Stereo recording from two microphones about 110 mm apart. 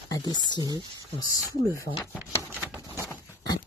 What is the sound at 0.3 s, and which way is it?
Speech, 40° left (ahead or behind).